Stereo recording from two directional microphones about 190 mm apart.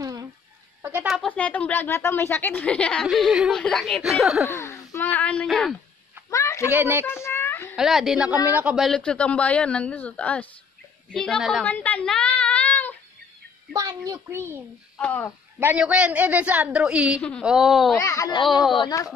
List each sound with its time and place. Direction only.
0.0 s a sound: 20° right (ahead or behind)
1.0 s a woman's voice: centre (ahead or behind)
4.5 s speech: 15° left (ahead or behind)
6.3 s a sound: 15° left (ahead or behind)
6.7 s a child's voice: 10° right (ahead or behind)
7.1 s a sound: 15° left (ahead or behind)
7.7 s a woman's voice: centre (ahead or behind)
13.7 s a child's voice: 20° right (ahead or behind)
15.0 s a child's voice: 10° left (ahead or behind)
15.6 s a woman's voice: 5° right (ahead or behind)
17.9 s a child's voice: 15° left (ahead or behind)
18.5 s a woman's voice: centre (ahead or behind)
18.8 s speech: 20° left (ahead or behind)